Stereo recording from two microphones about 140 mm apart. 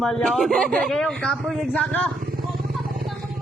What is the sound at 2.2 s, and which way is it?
Vehicle, 90° right.